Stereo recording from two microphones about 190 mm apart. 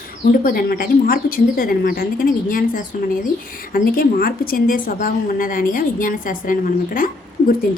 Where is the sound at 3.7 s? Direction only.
50° left (ahead or behind).